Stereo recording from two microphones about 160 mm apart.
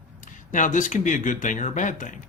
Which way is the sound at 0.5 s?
55° left (ahead or behind).